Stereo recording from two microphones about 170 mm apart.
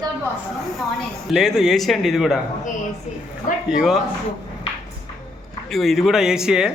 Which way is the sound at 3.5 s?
50° left (ahead or behind).